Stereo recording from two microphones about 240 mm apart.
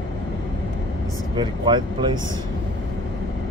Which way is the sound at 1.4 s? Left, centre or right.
Centre.